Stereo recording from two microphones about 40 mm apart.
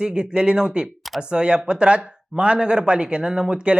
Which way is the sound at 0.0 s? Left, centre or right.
Right.